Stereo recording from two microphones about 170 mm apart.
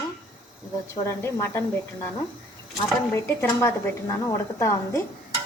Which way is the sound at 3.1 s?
15° left (ahead or behind).